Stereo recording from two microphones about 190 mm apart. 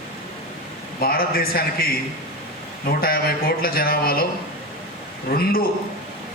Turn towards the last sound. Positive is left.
turn(degrees=50)  # may be behind; listen again after turning